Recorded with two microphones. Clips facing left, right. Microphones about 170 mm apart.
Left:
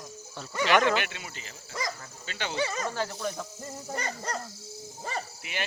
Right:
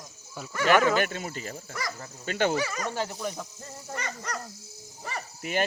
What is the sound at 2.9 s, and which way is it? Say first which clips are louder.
Speech: right 1 dB; 20° right (ahead or behind).